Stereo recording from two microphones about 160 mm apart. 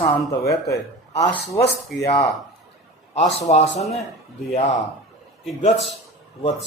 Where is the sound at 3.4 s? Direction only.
45° left (ahead or behind).